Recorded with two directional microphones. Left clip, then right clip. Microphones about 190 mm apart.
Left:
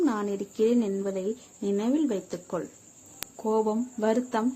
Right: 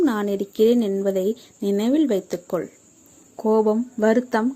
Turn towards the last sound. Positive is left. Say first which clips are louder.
# right 7 dB
turn(degrees=-30)  # may be behind; listen again after turning